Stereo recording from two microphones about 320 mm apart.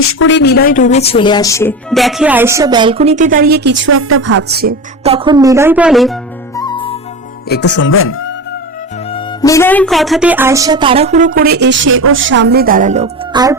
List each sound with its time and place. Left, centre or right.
0.0 s speech: left; by 4.7 s right
5.0 s speech: centre
6.6 s music: centre
7.4 s speech: left
9.1 s speech: centre